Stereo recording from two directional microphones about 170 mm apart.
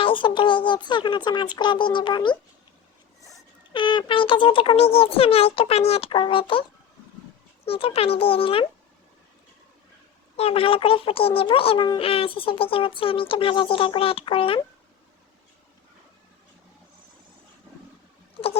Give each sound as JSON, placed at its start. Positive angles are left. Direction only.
{"t": 0.0, "sound": "speech", "side_deg": 30}
{"t": 3.7, "sound": "a child's voice", "side_deg": 30}
{"t": 10.3, "sound": "a child's voice", "side_deg": 35}